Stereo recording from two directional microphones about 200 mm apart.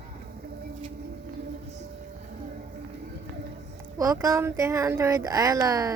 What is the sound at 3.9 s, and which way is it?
Speech, 15° right (ahead or behind).